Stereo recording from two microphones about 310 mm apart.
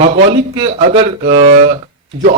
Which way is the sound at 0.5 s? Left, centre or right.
Centre.